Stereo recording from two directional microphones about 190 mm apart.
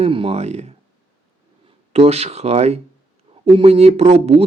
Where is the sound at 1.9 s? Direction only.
35° right (ahead or behind).